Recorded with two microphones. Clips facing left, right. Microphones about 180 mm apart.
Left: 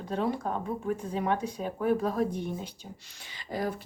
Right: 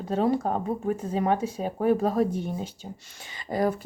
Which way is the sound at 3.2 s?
50° right (ahead or behind).